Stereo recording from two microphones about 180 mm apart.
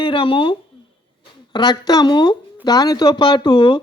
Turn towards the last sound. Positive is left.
turn(degrees=25)  # may be behind; listen again after turning